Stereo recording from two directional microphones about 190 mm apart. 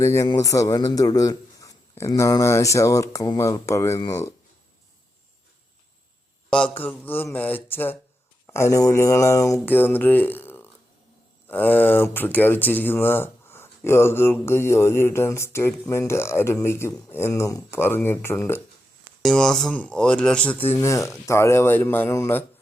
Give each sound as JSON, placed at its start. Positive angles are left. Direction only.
{"t": 0.0, "sound": "speech", "side_deg": 15}
{"t": 6.8, "sound": "speech", "side_deg": 10}